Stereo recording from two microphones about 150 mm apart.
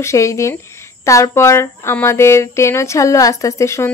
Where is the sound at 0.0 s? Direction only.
20° left (ahead or behind).